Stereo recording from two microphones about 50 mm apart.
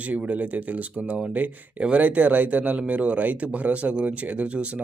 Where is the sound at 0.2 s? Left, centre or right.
Right.